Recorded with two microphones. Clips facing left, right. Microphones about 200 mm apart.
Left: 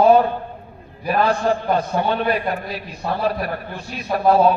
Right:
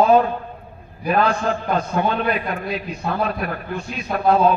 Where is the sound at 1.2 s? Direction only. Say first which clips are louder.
Left 2 dB; 55° right (ahead or behind).